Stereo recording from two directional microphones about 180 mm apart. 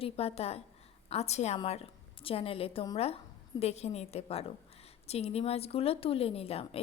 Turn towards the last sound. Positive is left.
turn(degrees=35)  # may be behind; listen again after turning